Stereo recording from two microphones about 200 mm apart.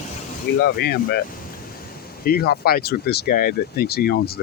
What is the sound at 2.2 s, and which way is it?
Speech, 50° left (ahead or behind).